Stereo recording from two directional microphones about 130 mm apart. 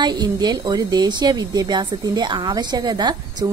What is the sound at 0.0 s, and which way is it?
A woman's voice, 35° right (ahead or behind).